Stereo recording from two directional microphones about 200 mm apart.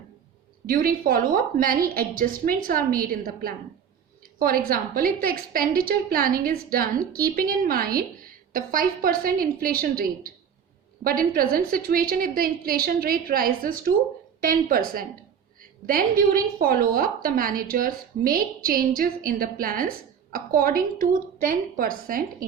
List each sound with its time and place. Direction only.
0.7 s a woman's voice: 45° right (ahead or behind)